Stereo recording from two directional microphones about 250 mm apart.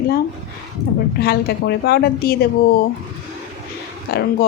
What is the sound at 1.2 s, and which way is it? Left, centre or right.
Speech, left.